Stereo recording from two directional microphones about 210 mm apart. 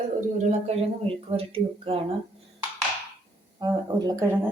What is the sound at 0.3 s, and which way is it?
Speech, 30° right (ahead or behind).